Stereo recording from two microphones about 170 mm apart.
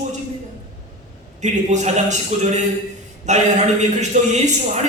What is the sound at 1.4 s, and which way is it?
A man's voice, 45° right (ahead or behind).